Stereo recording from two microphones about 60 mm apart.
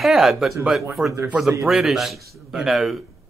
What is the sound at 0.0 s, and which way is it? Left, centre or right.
Speech, centre.